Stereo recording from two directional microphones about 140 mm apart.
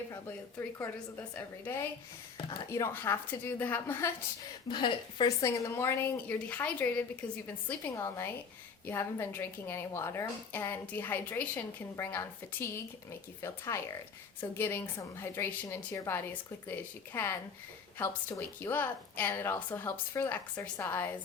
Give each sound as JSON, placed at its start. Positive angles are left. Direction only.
{"t": 1.4, "sound": "a woman's voice", "side_deg": 15}
{"t": 4.7, "sound": "a woman's voice", "side_deg": 35}
{"t": 5.4, "sound": "a woman's voice", "side_deg": 20}